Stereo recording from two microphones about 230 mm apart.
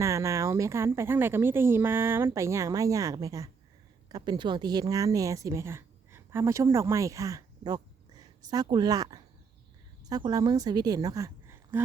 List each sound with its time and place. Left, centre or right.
0.0 s a woman's voice: centre